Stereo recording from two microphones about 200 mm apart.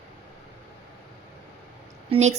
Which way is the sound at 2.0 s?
35° right (ahead or behind).